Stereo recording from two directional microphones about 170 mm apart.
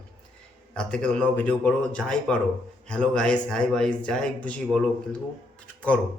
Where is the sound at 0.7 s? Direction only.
5° left (ahead or behind).